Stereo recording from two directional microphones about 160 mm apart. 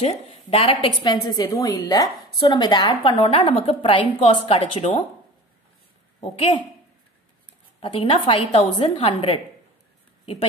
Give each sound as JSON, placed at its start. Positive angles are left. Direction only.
{"t": 0.0, "sound": "a woman's voice", "side_deg": 40}
{"t": 6.3, "sound": "a woman's voice", "side_deg": 35}
{"t": 7.8, "sound": "a woman's voice", "side_deg": 35}